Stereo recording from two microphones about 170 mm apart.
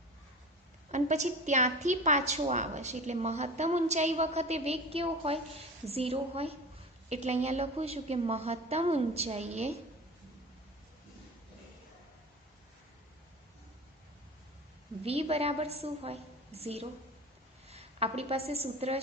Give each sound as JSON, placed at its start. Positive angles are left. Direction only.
{"t": 0.9, "sound": "a woman's voice", "side_deg": -45}
{"t": 15.0, "sound": "a woman's voice", "side_deg": -35}